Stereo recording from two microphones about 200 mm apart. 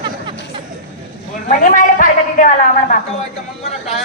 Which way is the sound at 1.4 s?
40° left (ahead or behind).